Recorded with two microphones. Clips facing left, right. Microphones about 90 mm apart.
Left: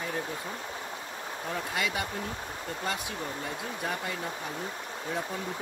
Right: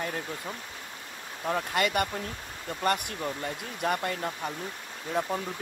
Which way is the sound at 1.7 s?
65° right (ahead or behind).